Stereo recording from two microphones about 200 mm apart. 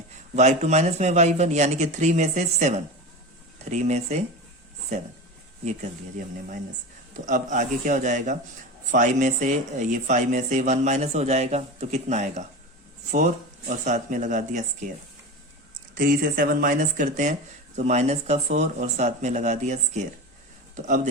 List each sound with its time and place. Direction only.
0.3 s speech: 35° right (ahead or behind)
7.3 s speech: 40° right (ahead or behind)
16.0 s speech: 45° right (ahead or behind)